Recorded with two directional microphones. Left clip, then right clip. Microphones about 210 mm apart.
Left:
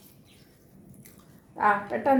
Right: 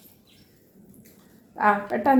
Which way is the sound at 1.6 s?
30° right (ahead or behind).